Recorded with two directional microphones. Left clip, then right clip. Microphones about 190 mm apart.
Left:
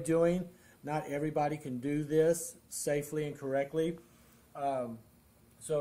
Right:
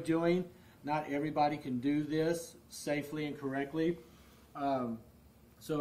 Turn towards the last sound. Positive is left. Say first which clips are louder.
# left 3 dB
turn(degrees=10)  # may be behind; listen again after turning